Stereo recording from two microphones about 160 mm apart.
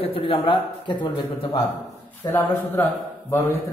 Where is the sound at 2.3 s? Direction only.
10° left (ahead or behind).